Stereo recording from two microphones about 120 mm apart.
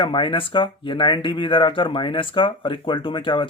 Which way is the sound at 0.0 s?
45° left (ahead or behind).